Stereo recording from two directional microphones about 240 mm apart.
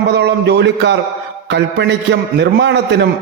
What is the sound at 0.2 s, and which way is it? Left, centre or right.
A man's voice, right.